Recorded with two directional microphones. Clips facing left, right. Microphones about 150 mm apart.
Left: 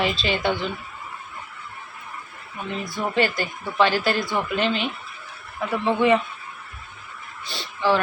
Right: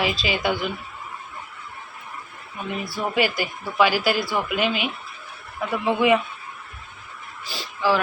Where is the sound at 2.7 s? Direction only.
5° right (ahead or behind).